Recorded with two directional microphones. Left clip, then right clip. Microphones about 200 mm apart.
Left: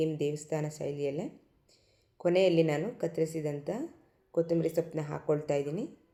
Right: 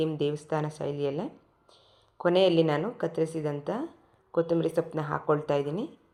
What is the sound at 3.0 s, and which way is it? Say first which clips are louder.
Speech: right 1 dB; 25° right (ahead or behind).